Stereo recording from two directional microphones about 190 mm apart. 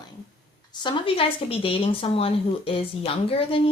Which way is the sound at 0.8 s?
25° left (ahead or behind).